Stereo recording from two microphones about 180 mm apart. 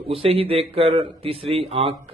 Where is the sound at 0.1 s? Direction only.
30° right (ahead or behind).